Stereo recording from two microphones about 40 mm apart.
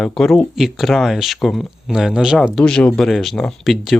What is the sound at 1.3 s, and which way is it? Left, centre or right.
Speech, centre.